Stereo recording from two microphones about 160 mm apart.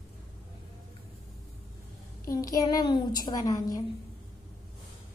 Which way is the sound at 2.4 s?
20° left (ahead or behind).